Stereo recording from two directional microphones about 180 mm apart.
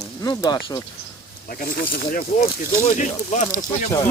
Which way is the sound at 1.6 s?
55° left (ahead or behind).